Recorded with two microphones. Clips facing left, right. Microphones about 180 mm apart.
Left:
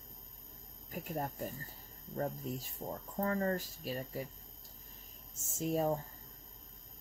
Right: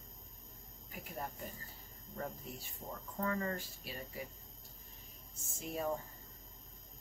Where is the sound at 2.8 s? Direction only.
45° left (ahead or behind).